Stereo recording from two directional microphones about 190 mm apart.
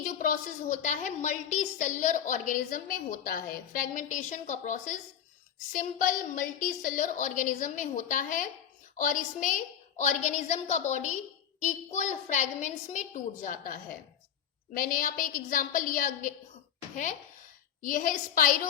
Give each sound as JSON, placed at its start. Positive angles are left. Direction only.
{"t": 0.0, "sound": "a woman's voice", "side_deg": 45}